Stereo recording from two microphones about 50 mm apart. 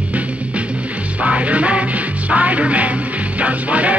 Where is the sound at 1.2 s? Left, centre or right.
Right.